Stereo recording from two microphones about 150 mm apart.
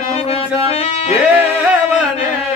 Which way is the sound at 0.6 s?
40° left (ahead or behind).